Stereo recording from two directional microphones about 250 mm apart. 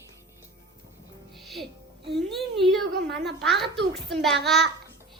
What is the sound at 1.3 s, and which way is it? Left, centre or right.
Music, centre.